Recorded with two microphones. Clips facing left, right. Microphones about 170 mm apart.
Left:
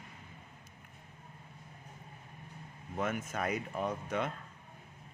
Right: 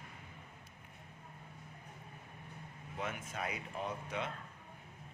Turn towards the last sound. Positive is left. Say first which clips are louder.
# left 5 dB
turn(degrees=45)  # may be behind; listen again after turning